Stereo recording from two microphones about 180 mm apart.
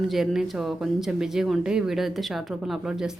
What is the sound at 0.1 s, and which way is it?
Speech, centre (ahead or behind).